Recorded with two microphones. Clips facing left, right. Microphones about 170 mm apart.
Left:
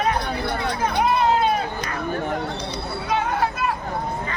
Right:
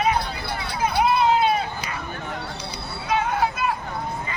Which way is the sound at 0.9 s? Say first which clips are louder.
Right 1 dB; 5° right (ahead or behind).